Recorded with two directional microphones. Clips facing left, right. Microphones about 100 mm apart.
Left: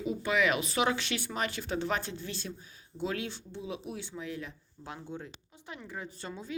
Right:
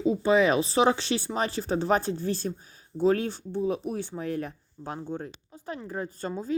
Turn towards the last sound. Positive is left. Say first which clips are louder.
# right 9 dB
turn(degrees=-40)  # may be behind; listen again after turning